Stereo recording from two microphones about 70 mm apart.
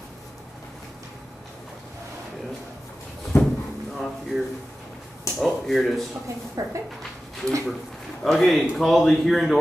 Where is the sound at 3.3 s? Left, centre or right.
Left.